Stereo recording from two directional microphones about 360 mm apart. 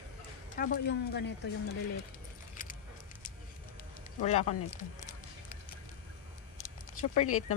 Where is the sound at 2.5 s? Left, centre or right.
Left.